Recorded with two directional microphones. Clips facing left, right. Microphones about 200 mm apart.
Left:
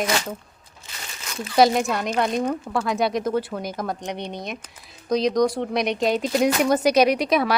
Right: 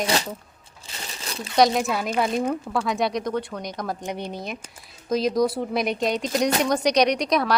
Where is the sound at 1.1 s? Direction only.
35° right (ahead or behind).